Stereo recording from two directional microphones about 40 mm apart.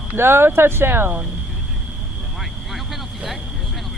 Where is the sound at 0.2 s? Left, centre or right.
Right.